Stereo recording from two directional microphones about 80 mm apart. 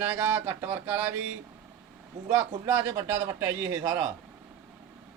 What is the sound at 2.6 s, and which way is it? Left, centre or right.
Speech, right.